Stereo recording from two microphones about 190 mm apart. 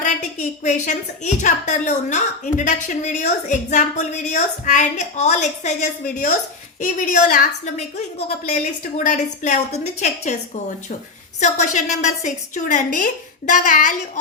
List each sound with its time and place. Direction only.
0.0 s a woman's voice: 40° left (ahead or behind)